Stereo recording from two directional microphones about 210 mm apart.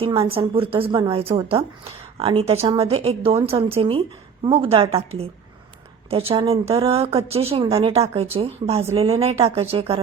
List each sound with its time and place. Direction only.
0.0 s speech: 25° right (ahead or behind)